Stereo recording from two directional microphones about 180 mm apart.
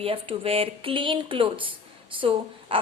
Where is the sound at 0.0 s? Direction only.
30° right (ahead or behind).